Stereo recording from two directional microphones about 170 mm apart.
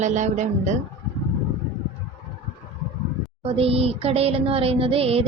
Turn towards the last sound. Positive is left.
turn(degrees=-35)  # may be behind; listen again after turning